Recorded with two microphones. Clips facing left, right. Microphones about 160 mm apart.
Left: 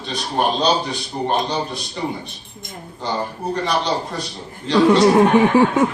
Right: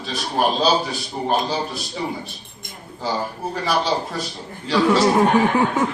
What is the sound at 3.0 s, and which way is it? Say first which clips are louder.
A man's voice: left 1 dB; 5° right (ahead or behind).